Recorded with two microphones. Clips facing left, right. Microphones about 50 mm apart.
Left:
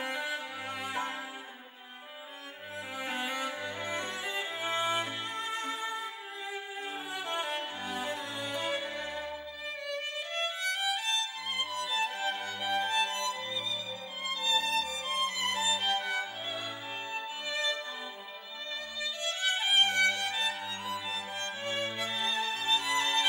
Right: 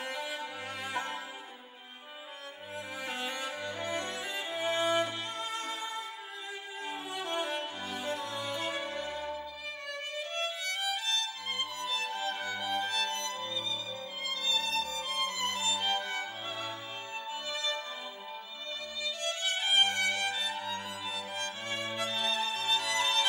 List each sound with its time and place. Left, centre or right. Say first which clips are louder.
0.0 s music: left 2 dB; left
3.0 s cello: left 3 dB; left
6.9 s music: right 1 dB; left
10.6 s violin: left 2 dB; left
12.5 s music: left 5 dB; left
14.4 s music: left 3 dB; left
19.2 s music: left 2 dB; left